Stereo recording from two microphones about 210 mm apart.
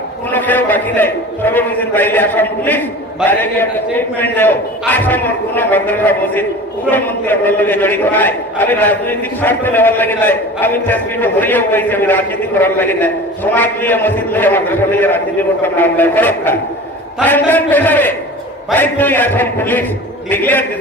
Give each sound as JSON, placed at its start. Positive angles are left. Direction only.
{"t": 0.3, "sound": "a man's voice", "side_deg": 10}